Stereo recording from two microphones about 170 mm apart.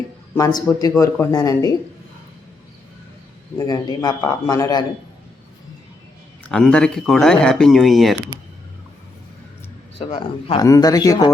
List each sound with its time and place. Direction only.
0.3 s speech: 20° left (ahead or behind)
3.6 s speech: 25° left (ahead or behind)
6.5 s speech: 5° left (ahead or behind)
10.1 s a man's voice: 35° left (ahead or behind)
10.6 s speech: 20° left (ahead or behind)